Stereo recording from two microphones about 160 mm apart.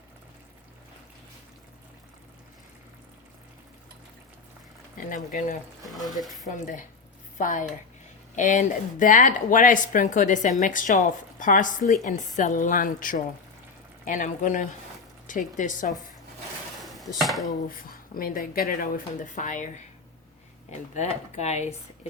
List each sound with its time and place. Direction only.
4.9 s speech: 60° left (ahead or behind)
5.9 s speech: centre (ahead or behind)
6.5 s a woman's voice: 55° left (ahead or behind)
16.8 s dishes: centre (ahead or behind)
17.2 s speech: centre (ahead or behind)
17.7 s a woman's voice: 65° left (ahead or behind); by 21.8 s 45° left (ahead or behind)